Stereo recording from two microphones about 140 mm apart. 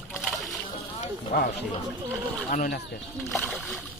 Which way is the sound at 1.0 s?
90° left.